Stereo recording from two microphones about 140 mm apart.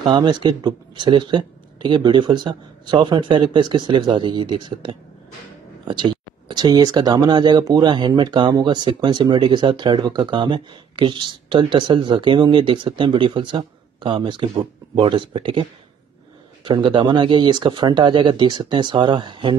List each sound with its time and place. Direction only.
0.0 s speech: 35° right (ahead or behind)
16.6 s speech: 35° right (ahead or behind)